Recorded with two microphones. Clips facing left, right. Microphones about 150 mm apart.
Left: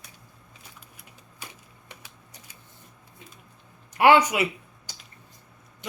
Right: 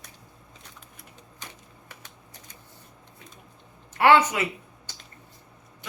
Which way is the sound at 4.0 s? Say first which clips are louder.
Left 1 dB; 15° left (ahead or behind).